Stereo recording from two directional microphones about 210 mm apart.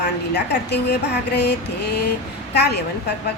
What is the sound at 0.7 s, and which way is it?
A woman's voice, 50° left (ahead or behind).